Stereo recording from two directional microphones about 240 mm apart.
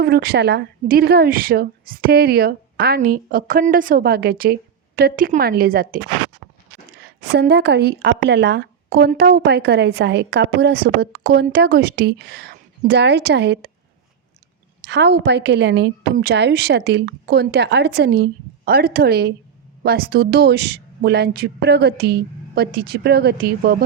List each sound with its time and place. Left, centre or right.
0.0 s a woman's voice: right
7.0 s a woman's voice: right
14.8 s a woman's voice: right